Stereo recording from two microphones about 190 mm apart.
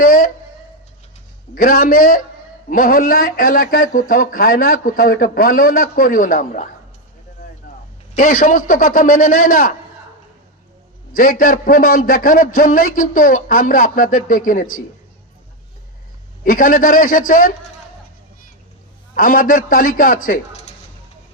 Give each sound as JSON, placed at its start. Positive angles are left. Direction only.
{"t": 0.0, "sound": "speech", "side_deg": 50}
{"t": 1.5, "sound": "a man's voice", "side_deg": 50}
{"t": 8.1, "sound": "a man's voice", "side_deg": 45}
{"t": 11.1, "sound": "a man's voice", "side_deg": 45}
{"t": 16.4, "sound": "a man's voice", "side_deg": 45}
{"t": 19.1, "sound": "a man's voice", "side_deg": 45}
{"t": 20.5, "sound": "a sound", "side_deg": 35}